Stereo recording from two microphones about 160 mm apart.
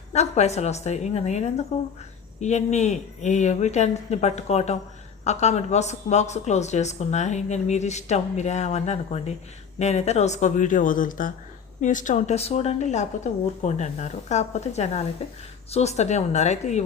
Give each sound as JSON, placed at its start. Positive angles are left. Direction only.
{"t": 0.1, "sound": "speech", "side_deg": 45}